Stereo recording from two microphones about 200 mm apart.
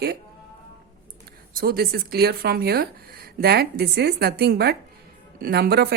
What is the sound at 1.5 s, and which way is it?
A woman's voice, 50° right (ahead or behind).